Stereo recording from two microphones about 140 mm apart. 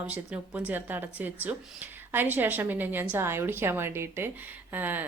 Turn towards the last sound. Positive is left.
turn(degrees=-15)  # may be behind; listen again after turning